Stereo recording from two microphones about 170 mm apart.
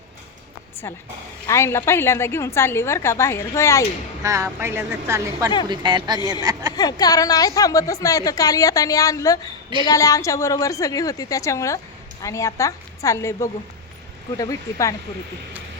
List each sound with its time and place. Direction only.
1.5 s a woman's voice: 15° left (ahead or behind)
4.2 s speech: 20° right (ahead or behind)
5.6 s a woman's voice: 25° right (ahead or behind)
6.7 s a woman's voice: 20° left (ahead or behind)